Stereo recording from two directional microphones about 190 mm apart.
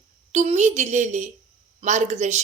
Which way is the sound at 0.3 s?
35° right (ahead or behind).